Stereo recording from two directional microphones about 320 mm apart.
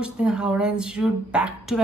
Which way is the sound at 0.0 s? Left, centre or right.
Centre.